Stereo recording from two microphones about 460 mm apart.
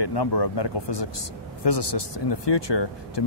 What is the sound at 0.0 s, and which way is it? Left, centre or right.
Speech, left.